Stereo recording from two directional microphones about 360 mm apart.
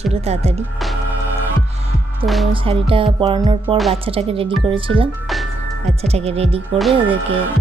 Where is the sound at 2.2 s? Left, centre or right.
Centre.